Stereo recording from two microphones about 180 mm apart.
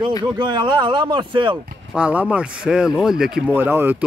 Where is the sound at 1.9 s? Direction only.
5° right (ahead or behind).